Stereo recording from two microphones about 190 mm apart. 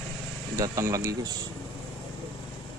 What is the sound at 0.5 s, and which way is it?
Speech, 15° right (ahead or behind).